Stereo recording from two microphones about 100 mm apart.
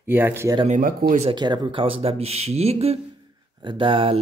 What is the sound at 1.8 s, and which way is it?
Speech, 75° right (ahead or behind).